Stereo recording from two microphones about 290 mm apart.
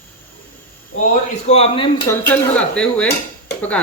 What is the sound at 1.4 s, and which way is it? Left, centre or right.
Speech, left.